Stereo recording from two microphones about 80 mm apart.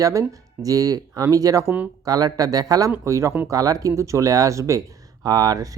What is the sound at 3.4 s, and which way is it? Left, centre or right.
Speech, right.